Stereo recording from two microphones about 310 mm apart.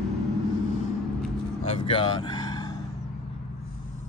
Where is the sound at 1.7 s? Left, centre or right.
Centre.